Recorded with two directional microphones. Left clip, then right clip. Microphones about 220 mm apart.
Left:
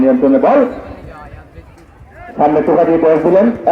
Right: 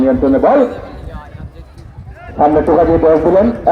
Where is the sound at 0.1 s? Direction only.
45° left (ahead or behind).